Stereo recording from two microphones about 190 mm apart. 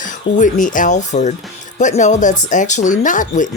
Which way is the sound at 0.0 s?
40° left (ahead or behind).